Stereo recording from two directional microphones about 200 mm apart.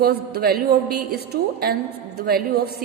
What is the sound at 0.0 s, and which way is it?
A woman's voice, 50° right (ahead or behind).